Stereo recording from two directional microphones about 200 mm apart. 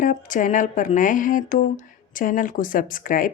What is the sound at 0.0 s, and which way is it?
Speech, 40° left (ahead or behind).